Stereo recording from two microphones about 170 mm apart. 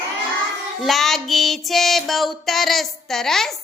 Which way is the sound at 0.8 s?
Centre (ahead or behind).